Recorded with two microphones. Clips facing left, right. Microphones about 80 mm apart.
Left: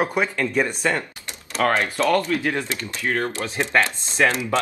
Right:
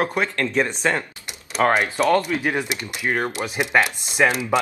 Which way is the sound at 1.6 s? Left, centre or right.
Centre.